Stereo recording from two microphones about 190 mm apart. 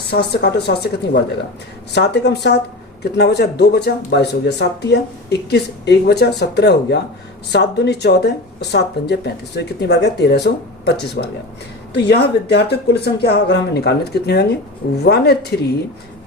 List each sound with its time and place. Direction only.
0.1 s speech: 60° left (ahead or behind)